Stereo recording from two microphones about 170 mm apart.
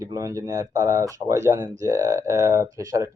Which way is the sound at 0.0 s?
20° right (ahead or behind).